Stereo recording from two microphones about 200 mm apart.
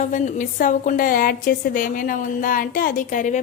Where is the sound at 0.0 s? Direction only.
40° left (ahead or behind).